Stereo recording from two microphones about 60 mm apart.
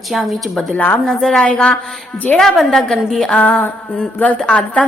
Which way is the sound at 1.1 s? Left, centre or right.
Centre.